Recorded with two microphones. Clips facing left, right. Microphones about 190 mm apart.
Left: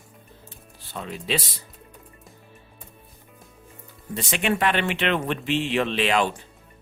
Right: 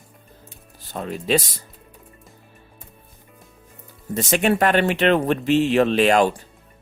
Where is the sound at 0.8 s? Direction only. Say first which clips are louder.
Right 5 dB; 45° right (ahead or behind).